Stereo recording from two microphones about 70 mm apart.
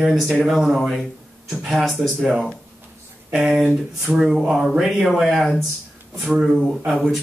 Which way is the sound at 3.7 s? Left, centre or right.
Centre.